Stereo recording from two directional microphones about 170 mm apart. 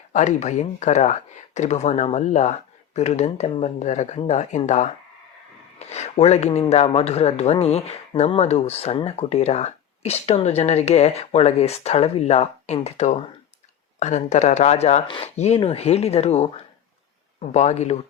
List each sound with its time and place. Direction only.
0.1 s speech: 45° left (ahead or behind)
17.5 s speech: 45° left (ahead or behind)